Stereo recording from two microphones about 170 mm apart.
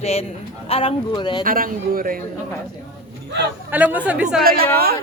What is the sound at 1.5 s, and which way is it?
Speech, 55° right (ahead or behind).